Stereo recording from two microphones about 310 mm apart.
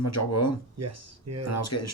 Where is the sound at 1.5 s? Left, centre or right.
Left.